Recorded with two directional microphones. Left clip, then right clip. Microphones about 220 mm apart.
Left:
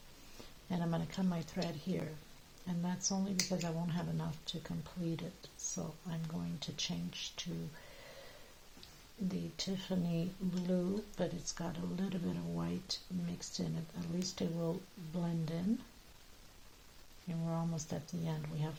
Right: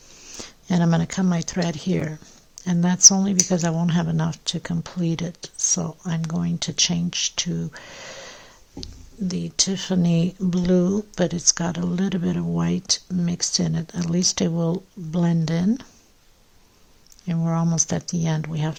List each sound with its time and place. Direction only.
0.3 s speech: 50° right (ahead or behind)
9.3 s speech: 50° right (ahead or behind)
17.2 s speech: 50° right (ahead or behind)